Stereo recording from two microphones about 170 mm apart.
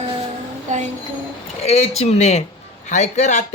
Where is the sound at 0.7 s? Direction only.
45° right (ahead or behind).